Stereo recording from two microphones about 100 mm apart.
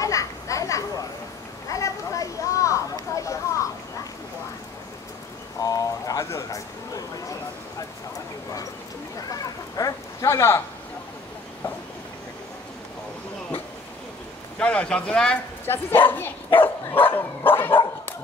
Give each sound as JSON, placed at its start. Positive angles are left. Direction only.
{"t": 0.0, "sound": "children playing", "side_deg": 35}
{"t": 1.7, "sound": "a sound", "side_deg": 35}
{"t": 5.6, "sound": "a sound", "side_deg": 35}
{"t": 9.3, "sound": "chicken", "side_deg": 35}
{"t": 14.6, "sound": "speech", "side_deg": 10}
{"t": 15.6, "sound": "speech", "side_deg": 20}
{"t": 16.6, "sound": "dog", "side_deg": 20}